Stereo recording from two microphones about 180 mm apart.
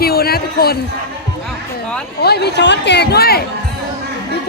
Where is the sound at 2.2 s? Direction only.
65° left (ahead or behind).